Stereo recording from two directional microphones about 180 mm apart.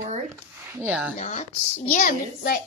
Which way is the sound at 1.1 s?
40° left (ahead or behind).